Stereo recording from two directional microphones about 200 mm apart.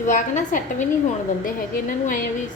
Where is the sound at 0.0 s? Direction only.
40° left (ahead or behind).